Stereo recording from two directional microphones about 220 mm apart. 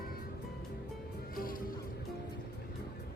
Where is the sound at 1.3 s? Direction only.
40° left (ahead or behind).